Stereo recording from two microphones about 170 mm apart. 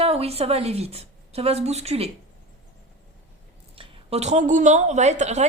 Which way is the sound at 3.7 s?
35° right (ahead or behind).